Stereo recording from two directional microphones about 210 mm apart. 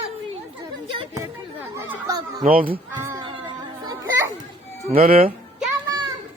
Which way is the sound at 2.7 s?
15° right (ahead or behind).